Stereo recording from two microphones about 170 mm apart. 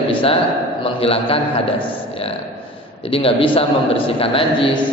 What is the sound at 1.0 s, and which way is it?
A man's voice, 35° left (ahead or behind).